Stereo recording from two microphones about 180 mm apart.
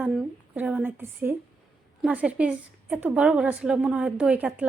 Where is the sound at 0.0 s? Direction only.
5° right (ahead or behind).